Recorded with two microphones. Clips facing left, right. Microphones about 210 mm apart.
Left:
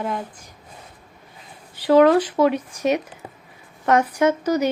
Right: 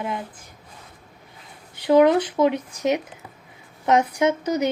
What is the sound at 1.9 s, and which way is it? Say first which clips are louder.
A woman's voice: left 2 dB; 15° right (ahead or behind).